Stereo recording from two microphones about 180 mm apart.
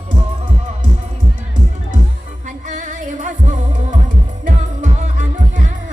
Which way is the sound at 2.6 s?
45° right (ahead or behind).